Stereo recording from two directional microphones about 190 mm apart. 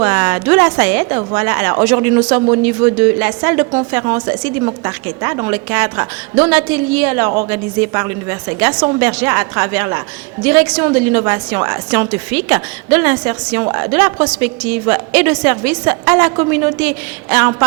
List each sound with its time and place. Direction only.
0.0 s a woman's voice: 15° right (ahead or behind)
9.0 s a woman's voice: 10° right (ahead or behind)